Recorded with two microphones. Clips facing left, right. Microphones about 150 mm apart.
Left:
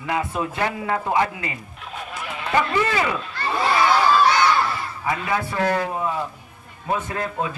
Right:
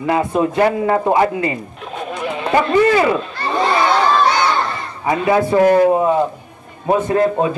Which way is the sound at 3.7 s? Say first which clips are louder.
Right 1 dB; 25° right (ahead or behind).